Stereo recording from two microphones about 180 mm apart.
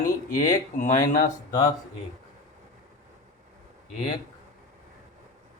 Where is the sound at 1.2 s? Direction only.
20° left (ahead or behind).